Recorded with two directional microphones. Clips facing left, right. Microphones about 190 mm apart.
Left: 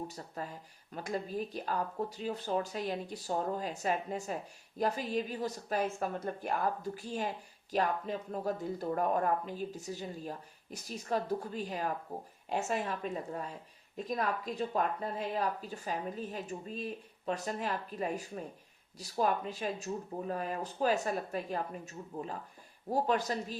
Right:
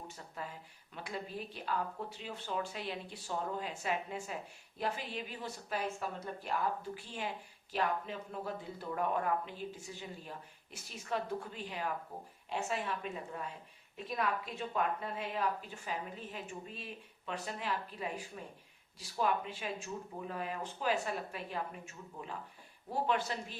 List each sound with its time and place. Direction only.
0.4 s a woman's voice: 40° left (ahead or behind)